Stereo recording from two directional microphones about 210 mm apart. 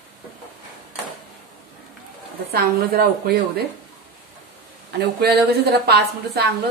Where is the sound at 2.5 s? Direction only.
45° right (ahead or behind).